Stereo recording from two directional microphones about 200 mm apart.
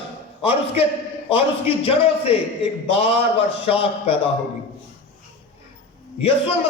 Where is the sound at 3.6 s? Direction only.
30° left (ahead or behind).